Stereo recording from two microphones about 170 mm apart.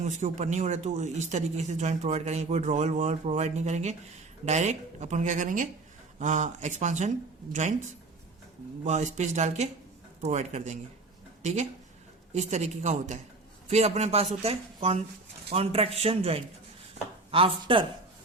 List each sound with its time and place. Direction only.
0.0 s a man's voice: 45° right (ahead or behind)